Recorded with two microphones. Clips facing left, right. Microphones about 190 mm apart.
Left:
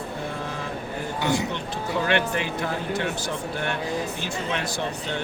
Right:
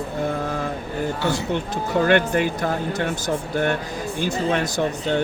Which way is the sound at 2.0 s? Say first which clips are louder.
Right 7 dB; 45° right (ahead or behind).